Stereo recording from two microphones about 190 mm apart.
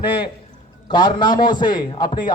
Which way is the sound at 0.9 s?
25° left (ahead or behind).